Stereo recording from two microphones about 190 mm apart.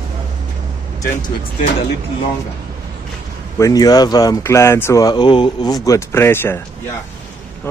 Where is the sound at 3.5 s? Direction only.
20° left (ahead or behind).